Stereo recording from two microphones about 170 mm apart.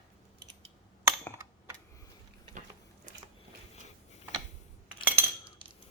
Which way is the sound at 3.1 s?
50° right (ahead or behind).